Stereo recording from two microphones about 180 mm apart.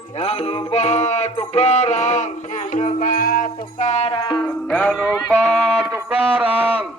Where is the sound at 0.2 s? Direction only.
35° left (ahead or behind).